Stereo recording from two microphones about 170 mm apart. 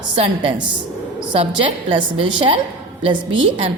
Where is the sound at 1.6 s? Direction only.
30° right (ahead or behind).